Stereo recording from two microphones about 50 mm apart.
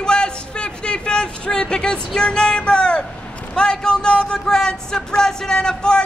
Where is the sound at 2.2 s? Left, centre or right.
Centre.